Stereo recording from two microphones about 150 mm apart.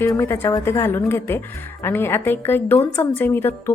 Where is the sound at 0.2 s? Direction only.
20° left (ahead or behind).